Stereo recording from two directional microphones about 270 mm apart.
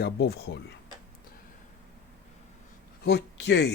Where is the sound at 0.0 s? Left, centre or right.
Left.